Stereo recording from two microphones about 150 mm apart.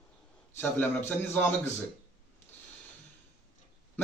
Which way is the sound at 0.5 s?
15° left (ahead or behind).